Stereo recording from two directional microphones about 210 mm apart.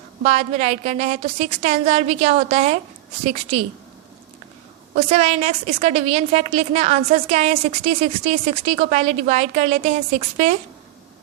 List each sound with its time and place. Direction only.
0.2 s a woman's voice: 35° right (ahead or behind)
4.9 s a woman's voice: 30° right (ahead or behind)